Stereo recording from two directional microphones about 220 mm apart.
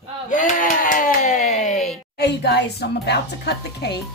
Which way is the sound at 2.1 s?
50° left (ahead or behind).